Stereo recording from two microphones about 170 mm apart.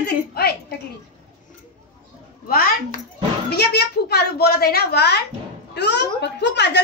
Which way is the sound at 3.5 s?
75° left (ahead or behind).